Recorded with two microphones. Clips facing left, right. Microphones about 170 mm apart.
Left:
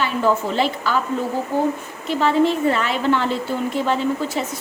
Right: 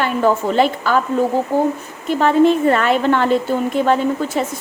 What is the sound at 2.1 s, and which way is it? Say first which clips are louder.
A woman's voice: right 4 dB; 55° right (ahead or behind).